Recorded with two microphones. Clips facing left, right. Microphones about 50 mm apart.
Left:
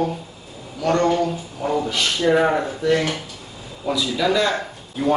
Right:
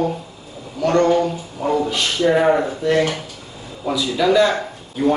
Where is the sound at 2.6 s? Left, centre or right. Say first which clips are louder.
Right 2 dB; centre.